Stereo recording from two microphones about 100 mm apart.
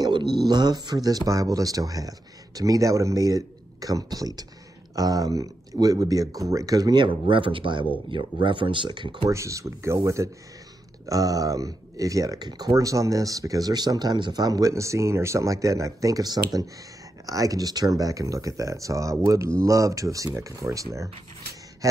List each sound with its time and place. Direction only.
0.0 s dog: 50° right (ahead or behind)
0.5 s speech: 45° right (ahead or behind)
9.3 s speech: 30° right (ahead or behind)